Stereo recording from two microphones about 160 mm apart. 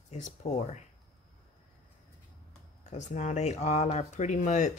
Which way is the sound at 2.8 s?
50° left (ahead or behind).